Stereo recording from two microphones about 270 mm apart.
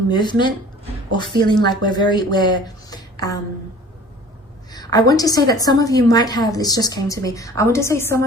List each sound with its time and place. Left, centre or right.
0.1 s a woman's voice: centre
4.7 s a woman's voice: centre